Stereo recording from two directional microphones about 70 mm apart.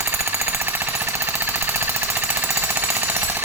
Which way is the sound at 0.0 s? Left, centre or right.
Right.